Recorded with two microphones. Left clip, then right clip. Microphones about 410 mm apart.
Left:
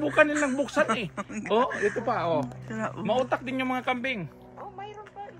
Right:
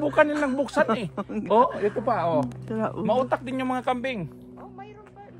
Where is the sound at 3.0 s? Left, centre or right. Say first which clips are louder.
Right 2 dB; right.